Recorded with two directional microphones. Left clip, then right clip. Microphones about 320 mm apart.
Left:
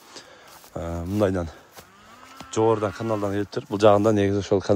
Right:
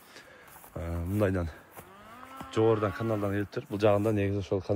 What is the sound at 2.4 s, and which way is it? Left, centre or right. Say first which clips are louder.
Speech: left 5 dB; centre.